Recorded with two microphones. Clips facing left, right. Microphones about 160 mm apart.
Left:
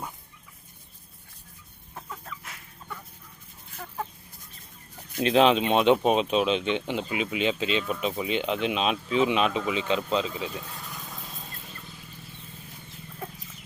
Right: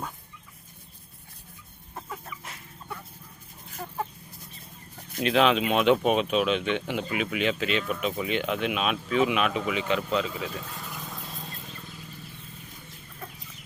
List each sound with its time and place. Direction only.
5.1 s speech: 30° left (ahead or behind)
10.9 s vehicle: centre (ahead or behind)